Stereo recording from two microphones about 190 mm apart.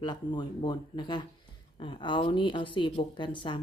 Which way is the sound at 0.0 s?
25° left (ahead or behind).